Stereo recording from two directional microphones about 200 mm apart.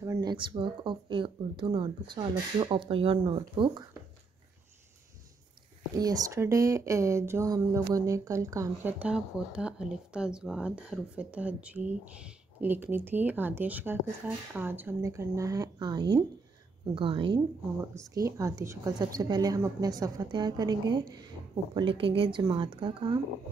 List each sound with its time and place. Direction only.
0.0 s speech: 15° right (ahead or behind)
5.9 s speech: 20° right (ahead or behind)